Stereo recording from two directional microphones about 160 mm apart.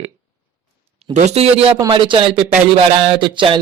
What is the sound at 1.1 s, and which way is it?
Speech, 45° right (ahead or behind).